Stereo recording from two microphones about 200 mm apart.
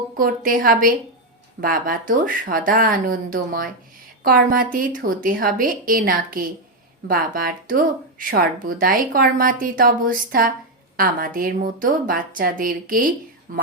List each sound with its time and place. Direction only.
0.2 s speech: 45° right (ahead or behind)